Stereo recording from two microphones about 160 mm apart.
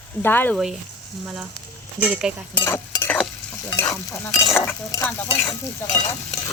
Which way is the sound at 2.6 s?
15° left (ahead or behind).